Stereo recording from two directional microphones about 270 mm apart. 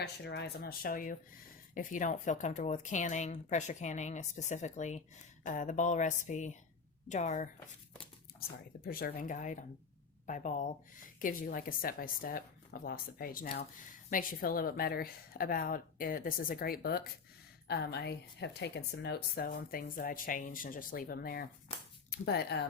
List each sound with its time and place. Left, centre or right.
0.0 s a woman's voice: left
8.8 s a woman's voice: left